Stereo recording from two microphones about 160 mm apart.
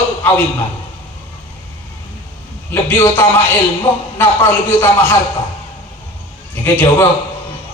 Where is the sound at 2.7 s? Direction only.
15° left (ahead or behind).